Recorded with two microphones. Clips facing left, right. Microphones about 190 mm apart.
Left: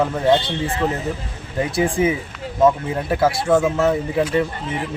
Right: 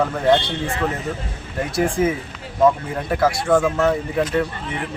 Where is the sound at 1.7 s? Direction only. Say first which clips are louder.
Even; centre (ahead or behind).